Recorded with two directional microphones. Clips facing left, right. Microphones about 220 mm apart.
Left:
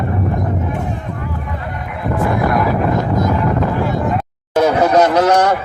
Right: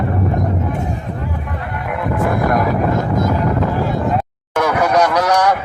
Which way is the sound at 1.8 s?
55° right (ahead or behind).